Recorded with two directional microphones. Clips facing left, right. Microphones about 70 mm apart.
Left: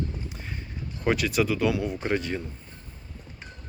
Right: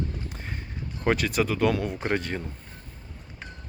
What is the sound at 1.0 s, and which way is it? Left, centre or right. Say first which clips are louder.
Speech: even; right.